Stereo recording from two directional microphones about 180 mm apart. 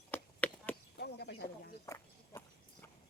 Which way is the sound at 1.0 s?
65° left (ahead or behind).